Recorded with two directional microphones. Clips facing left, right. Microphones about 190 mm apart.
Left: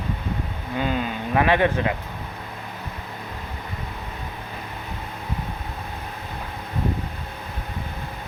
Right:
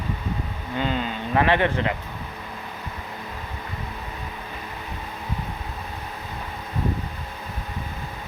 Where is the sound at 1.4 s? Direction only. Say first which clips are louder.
Left 1 dB; 15° left (ahead or behind).